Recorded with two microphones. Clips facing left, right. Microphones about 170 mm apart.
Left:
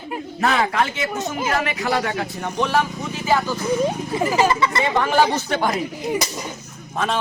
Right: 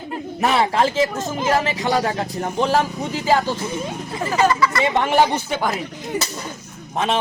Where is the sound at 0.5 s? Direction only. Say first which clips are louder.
Right 6 dB; 30° right (ahead or behind).